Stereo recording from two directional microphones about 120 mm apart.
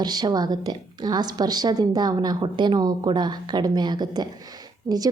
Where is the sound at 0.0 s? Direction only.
35° right (ahead or behind).